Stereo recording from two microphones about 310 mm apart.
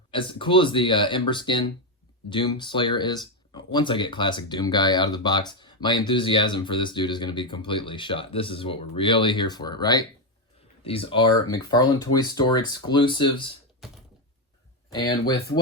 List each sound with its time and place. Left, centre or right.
0.1 s speech: centre
14.9 s speech: centre